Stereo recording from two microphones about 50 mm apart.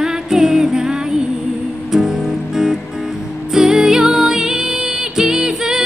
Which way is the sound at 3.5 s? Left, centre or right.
Centre.